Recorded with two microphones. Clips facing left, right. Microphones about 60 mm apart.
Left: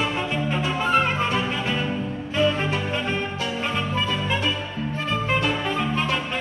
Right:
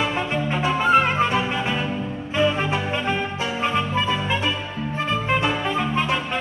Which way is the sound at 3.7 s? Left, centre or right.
Centre.